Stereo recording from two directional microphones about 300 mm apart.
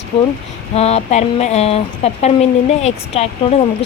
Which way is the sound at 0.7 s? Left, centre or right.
Left.